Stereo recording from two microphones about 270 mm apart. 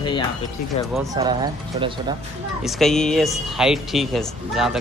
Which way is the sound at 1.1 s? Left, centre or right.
Centre.